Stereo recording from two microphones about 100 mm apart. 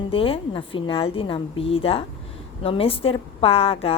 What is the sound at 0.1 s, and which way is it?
A woman's voice, 65° left (ahead or behind).